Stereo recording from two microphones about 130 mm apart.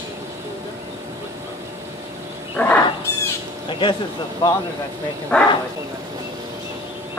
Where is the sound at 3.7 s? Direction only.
40° left (ahead or behind).